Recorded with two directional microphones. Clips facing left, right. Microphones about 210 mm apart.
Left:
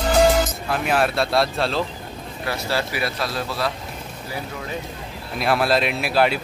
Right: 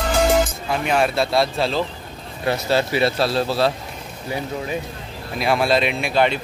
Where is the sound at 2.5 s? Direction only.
20° right (ahead or behind).